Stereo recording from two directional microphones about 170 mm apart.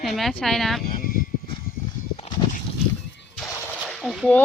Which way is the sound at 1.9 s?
40° left (ahead or behind).